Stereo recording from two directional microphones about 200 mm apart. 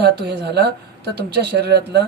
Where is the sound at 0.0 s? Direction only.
55° right (ahead or behind).